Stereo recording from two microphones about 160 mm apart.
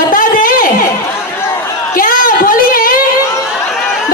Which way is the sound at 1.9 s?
60° left (ahead or behind).